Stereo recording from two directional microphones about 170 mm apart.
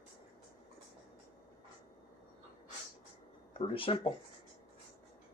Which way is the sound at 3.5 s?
30° left (ahead or behind).